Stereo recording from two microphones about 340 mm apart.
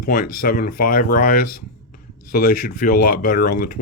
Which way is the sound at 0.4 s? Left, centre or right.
Left.